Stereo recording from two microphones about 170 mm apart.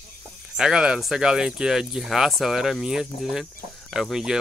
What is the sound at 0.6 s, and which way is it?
Speech, 5° right (ahead or behind).